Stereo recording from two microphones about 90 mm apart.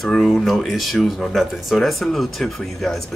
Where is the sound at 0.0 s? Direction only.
5° left (ahead or behind).